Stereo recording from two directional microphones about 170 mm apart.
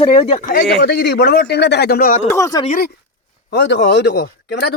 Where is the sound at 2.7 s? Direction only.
60° left (ahead or behind).